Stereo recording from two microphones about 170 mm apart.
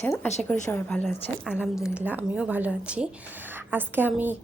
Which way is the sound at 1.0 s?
5° right (ahead or behind).